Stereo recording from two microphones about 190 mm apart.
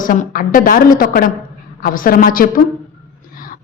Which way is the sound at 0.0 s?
45° left (ahead or behind).